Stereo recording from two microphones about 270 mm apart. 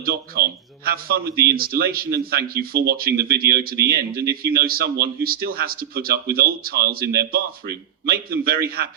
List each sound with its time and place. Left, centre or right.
0.0 s speech: right